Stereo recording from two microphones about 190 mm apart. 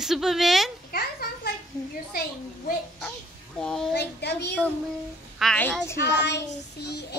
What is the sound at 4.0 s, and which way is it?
Speech, 60° left (ahead or behind).